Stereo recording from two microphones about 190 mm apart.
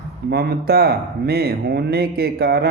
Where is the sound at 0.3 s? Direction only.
55° right (ahead or behind).